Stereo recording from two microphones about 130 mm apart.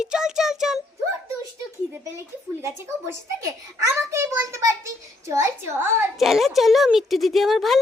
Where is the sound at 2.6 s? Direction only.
20° right (ahead or behind).